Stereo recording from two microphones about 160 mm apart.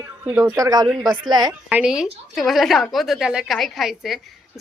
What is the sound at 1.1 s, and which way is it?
Speech, 25° right (ahead or behind).